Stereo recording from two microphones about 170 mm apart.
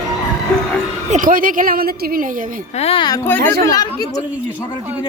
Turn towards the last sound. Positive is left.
turn(degrees=15)  # may be behind; listen again after turning